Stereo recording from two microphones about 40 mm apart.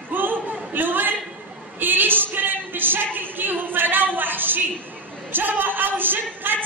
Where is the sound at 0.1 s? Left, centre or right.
Right.